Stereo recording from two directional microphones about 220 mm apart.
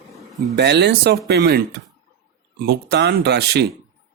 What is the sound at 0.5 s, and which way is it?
Speech, 50° right (ahead or behind).